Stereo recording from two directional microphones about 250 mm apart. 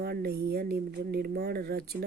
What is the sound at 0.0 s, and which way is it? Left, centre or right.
Speech, right.